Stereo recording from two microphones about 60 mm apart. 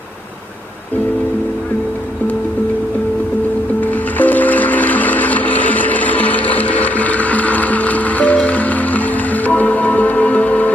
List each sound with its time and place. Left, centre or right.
4.2 s music: left